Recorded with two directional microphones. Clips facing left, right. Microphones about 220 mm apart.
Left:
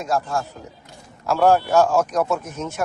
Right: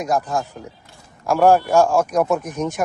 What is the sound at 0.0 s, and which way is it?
A man's voice, 15° right (ahead or behind).